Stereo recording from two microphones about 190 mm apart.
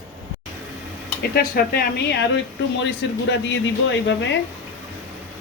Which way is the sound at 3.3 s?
75° left (ahead or behind).